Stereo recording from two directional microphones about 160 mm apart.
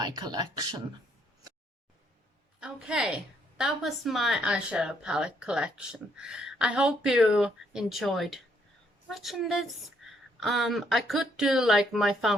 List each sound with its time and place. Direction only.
0.0 s speech: 25° right (ahead or behind)
2.6 s a woman's voice: 5° right (ahead or behind)
10.0 s a sound: centre (ahead or behind)
10.4 s speech: centre (ahead or behind)